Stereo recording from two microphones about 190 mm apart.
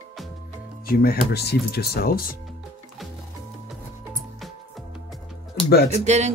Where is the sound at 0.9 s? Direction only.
55° left (ahead or behind).